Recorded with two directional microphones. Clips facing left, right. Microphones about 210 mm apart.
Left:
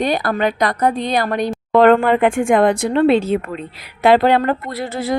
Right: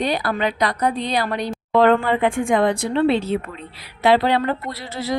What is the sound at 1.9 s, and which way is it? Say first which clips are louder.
Speech: left 5 dB; 70° left (ahead or behind).